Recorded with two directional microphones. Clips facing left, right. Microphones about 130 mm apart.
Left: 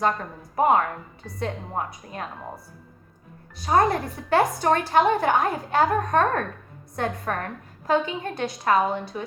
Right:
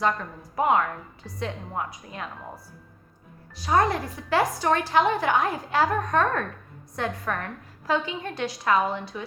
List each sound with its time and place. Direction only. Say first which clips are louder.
0.0 s a woman's voice: left 1 dB; 45° left (ahead or behind)
3.8 s a woman's voice: left 2 dB; 55° left (ahead or behind)
5.4 s a woman's voice: left 2 dB; 25° left (ahead or behind)
6.1 s a woman's voice: left 2 dB; 45° left (ahead or behind)